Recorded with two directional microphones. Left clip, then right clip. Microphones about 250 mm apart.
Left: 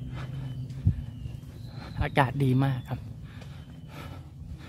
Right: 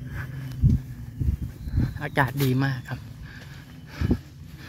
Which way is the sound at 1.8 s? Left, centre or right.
Centre.